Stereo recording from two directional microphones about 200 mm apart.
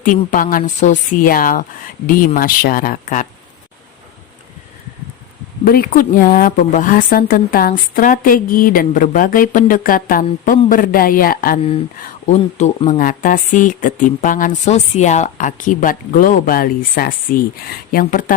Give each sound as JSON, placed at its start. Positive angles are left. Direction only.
{"t": 0.0, "sound": "a woman's voice", "side_deg": 40}
{"t": 5.6, "sound": "a woman's voice", "side_deg": 45}
{"t": 12.0, "sound": "a woman's voice", "side_deg": 35}